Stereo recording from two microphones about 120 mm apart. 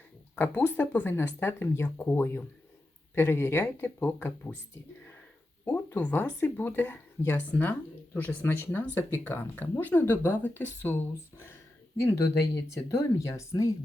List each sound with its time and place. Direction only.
0.3 s speech: 15° left (ahead or behind)
5.6 s speech: 15° left (ahead or behind)